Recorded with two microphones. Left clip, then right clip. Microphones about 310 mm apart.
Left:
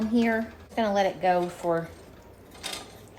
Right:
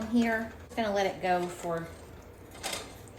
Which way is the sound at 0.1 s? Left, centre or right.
Left.